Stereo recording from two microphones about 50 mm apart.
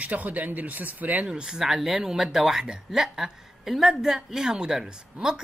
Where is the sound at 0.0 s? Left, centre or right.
Right.